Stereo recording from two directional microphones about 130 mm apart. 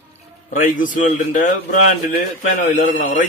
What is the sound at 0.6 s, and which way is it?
Speech, 90° left.